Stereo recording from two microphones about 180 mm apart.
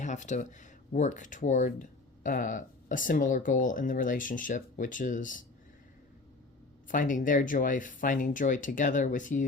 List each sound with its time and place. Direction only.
0.0 s speech: 40° left (ahead or behind)
6.8 s speech: 50° left (ahead or behind)